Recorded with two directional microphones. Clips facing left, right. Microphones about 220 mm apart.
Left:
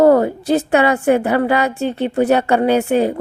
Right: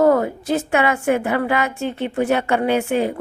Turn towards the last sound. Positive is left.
turn(degrees=35)  # may be behind; listen again after turning